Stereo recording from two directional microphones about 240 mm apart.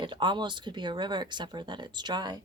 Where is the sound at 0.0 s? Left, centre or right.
Centre.